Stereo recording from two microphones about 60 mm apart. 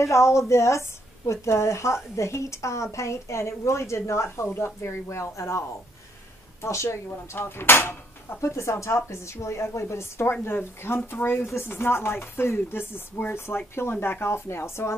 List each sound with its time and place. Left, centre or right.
0.0 s a woman's voice: left
7.3 s speech: left